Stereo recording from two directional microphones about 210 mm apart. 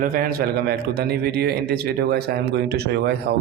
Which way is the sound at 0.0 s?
40° right (ahead or behind).